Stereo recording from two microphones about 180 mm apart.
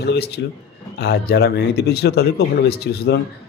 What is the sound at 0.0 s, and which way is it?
Speech, 65° left (ahead or behind).